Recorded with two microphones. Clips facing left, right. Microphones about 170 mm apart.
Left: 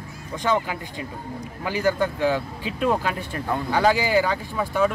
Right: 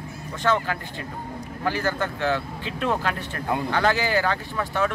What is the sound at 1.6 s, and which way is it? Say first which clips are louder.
Speech: left 3 dB; 10° left (ahead or behind).